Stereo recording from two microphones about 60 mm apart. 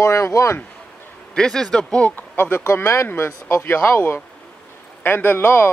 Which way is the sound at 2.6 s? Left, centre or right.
Left.